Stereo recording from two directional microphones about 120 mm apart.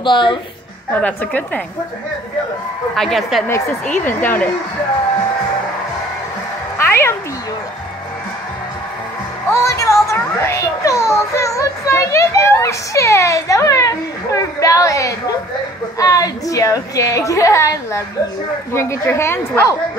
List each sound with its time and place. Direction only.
0.0 s a woman's voice: 40° left (ahead or behind)
0.9 s a woman's voice: 15° left (ahead or behind)
3.0 s a woman's voice: centre (ahead or behind)
4.0 s a woman's voice: 15° left (ahead or behind)
6.8 s cat: 20° left (ahead or behind)
9.5 s a child's voice: 25° left (ahead or behind)